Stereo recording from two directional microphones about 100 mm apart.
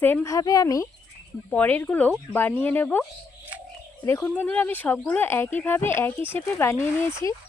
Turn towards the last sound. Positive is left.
turn(degrees=30)  # may be behind; listen again after turning